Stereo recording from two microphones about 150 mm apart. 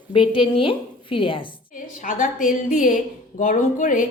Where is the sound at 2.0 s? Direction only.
60° left (ahead or behind).